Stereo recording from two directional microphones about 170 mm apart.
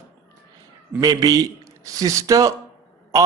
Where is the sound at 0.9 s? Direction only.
20° right (ahead or behind).